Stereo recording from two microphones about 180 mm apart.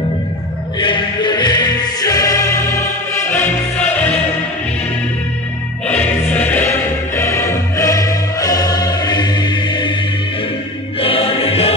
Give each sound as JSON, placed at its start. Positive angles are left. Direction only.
{"t": 0.7, "sound": "music", "side_deg": 25}
{"t": 5.9, "sound": "music", "side_deg": 10}
{"t": 11.0, "sound": "music", "side_deg": 30}